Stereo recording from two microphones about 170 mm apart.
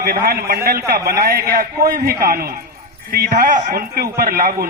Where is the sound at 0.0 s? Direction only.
60° right (ahead or behind).